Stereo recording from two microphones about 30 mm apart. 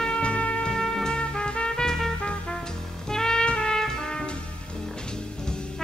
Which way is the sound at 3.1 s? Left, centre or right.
Left.